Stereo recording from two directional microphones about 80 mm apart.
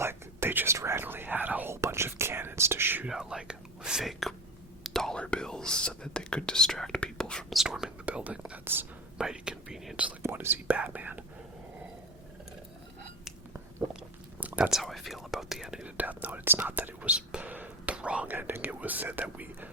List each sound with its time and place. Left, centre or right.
0.0 s whispering: right
1.7 s whispering: right
3.1 s speech: centre
4.8 s whispering: centre
7.5 s whispering: centre
8.0 s whispering: centre
8.6 s whispering: right
9.1 s whispering: centre
10.2 s whispering: right
14.4 s whispering: centre
14.7 s whispering: centre
16.0 s whispering: right